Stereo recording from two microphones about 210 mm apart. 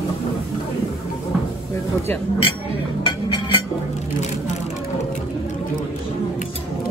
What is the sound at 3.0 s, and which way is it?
Music, 20° left (ahead or behind).